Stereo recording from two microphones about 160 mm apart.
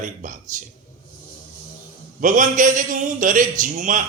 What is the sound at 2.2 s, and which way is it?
A man's voice, 55° right (ahead or behind).